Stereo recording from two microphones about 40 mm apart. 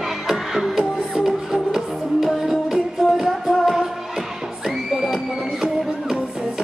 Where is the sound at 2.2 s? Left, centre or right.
Centre.